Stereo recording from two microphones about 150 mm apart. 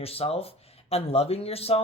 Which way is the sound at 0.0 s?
40° left (ahead or behind).